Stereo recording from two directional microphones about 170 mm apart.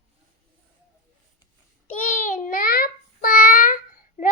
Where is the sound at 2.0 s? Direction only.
50° left (ahead or behind).